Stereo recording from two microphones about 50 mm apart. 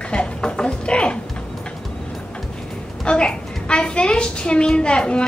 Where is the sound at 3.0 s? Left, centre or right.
Centre.